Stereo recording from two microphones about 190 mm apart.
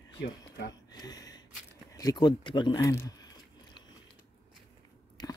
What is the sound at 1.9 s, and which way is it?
Speech, 20° left (ahead or behind).